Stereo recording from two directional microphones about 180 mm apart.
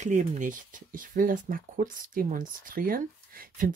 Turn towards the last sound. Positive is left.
turn(degrees=-55)  # may be behind; listen again after turning